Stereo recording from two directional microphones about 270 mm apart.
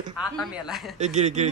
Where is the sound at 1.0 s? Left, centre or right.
Right.